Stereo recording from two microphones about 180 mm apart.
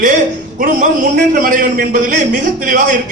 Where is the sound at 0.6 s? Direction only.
45° right (ahead or behind).